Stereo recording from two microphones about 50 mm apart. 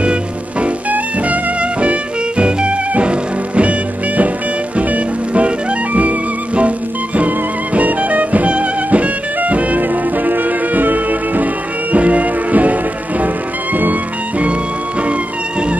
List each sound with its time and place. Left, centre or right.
0.0 s music: right
4.7 s music: right